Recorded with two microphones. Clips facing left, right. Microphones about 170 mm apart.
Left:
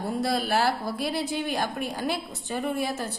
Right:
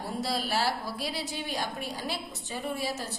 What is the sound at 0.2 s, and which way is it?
A woman's voice, 55° left (ahead or behind).